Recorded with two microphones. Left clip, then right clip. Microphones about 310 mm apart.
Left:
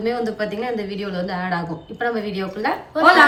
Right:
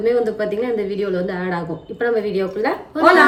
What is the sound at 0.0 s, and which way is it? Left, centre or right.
Speech, centre.